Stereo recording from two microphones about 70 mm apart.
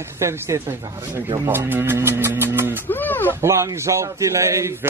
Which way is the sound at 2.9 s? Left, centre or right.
Left.